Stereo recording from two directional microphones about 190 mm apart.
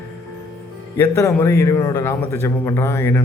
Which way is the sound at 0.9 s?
10° left (ahead or behind).